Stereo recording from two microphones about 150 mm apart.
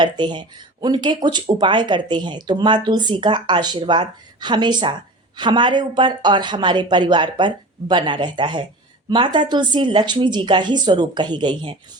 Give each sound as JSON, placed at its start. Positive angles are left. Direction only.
{"t": 0.0, "sound": "speech", "side_deg": -30}